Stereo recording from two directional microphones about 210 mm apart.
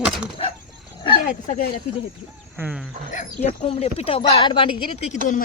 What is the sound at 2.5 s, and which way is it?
Speech, 5° right (ahead or behind).